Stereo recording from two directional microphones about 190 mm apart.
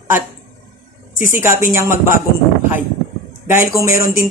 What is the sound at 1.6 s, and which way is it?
Speech, 15° right (ahead or behind).